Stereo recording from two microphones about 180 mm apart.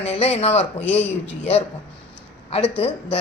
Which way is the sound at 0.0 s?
35° left (ahead or behind).